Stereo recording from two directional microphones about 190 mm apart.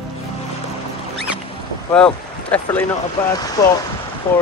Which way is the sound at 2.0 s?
5° left (ahead or behind).